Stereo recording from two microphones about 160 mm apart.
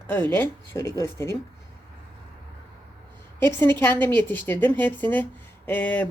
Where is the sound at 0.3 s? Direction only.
15° left (ahead or behind).